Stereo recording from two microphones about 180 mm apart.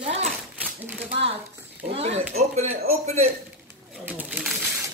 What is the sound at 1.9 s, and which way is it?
Speech, 35° right (ahead or behind).